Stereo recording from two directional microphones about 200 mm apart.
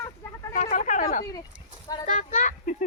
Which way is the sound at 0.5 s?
40° left (ahead or behind).